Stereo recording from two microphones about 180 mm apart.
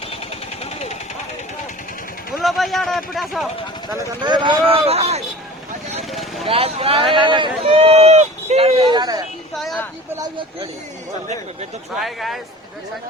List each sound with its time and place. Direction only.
0.6 s engine: 35° left (ahead or behind)
2.3 s speech: centre (ahead or behind)
3.8 s speech: 25° right (ahead or behind)
6.0 s vehicle: centre (ahead or behind)
6.5 s speech: 35° right (ahead or behind)
9.6 s a sound: centre (ahead or behind)
10.2 s speech: 25° right (ahead or behind)
11.9 s speech: centre (ahead or behind)